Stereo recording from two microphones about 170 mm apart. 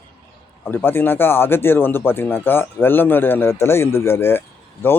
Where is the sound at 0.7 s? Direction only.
10° left (ahead or behind).